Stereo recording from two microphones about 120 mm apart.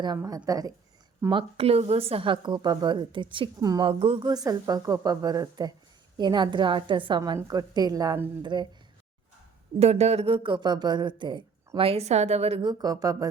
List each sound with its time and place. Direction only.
0.3 s a woman's voice: 30° right (ahead or behind)
1.3 s speech: 50° right (ahead or behind)
3.6 s a woman's voice: 30° right (ahead or behind)
3.8 s speech: 50° right (ahead or behind)
4.4 s a woman's voice: 30° right (ahead or behind)
7.3 s a woman's voice: 30° right (ahead or behind)
9.7 s speech: 65° right (ahead or behind)
12.6 s a woman's voice: 30° right (ahead or behind)